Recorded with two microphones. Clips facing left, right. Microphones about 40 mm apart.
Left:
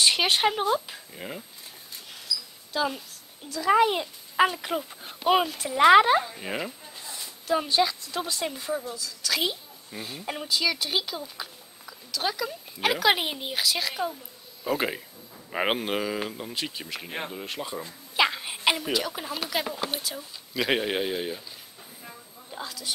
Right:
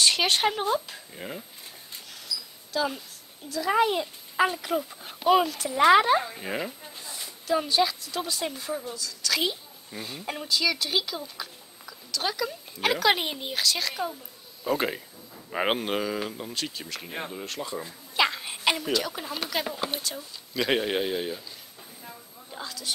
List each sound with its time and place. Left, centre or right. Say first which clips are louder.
0.0 s speech: left 1 dB; centre
2.7 s a woman's voice: even; centre
4.6 s speech: right 2 dB; left
5.9 s a woman's voice: left 2 dB; centre
6.2 s a sound: even; centre
8.2 s a woman's voice: even; centre
22.0 s a sound: even; centre